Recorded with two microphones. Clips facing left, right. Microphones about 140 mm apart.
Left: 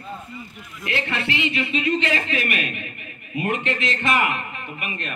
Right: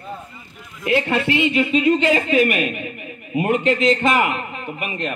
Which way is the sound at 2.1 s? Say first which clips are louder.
Right 8 dB; 25° right (ahead or behind).